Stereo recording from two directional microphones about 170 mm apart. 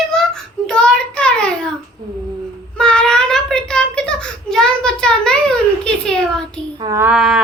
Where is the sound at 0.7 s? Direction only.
5° left (ahead or behind).